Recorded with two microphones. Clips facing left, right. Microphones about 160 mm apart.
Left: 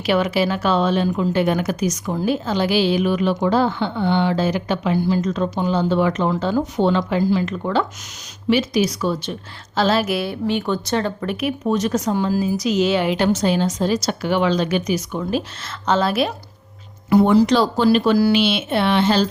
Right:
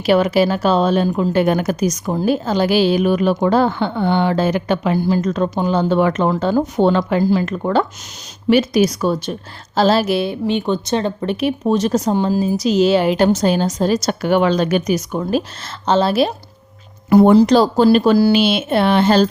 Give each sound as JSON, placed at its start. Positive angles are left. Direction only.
{"t": 0.0, "sound": "speech", "side_deg": -40}
{"t": 9.7, "sound": "a woman's voice", "side_deg": -35}
{"t": 15.9, "sound": "a woman's voice", "side_deg": -30}
{"t": 17.1, "sound": "a woman's voice", "side_deg": -45}